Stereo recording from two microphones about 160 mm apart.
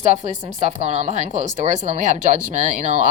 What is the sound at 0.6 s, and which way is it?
Speech, 45° right (ahead or behind).